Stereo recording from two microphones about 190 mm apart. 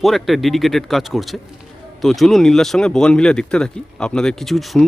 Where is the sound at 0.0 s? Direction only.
Centre (ahead or behind).